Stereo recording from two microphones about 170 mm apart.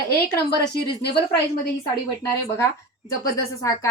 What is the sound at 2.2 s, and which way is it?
Speech, 20° left (ahead or behind).